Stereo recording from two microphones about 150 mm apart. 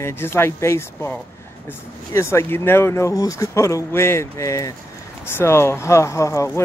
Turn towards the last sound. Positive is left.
turn(degrees=20)  # may be behind; listen again after turning